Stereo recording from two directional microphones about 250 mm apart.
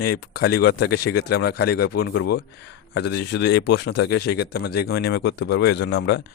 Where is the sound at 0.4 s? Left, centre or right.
Left.